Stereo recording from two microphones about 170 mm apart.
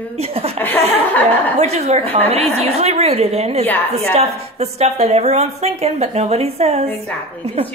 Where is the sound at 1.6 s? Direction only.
40° right (ahead or behind).